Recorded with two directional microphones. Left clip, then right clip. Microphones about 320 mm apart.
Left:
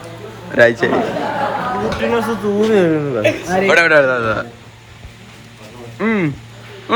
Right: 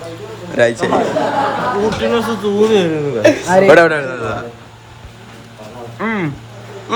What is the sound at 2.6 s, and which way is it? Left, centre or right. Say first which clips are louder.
Speech: right 2 dB; centre.